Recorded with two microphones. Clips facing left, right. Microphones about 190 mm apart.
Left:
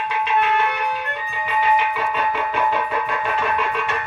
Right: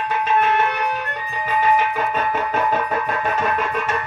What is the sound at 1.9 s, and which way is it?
Music, 45° right (ahead or behind).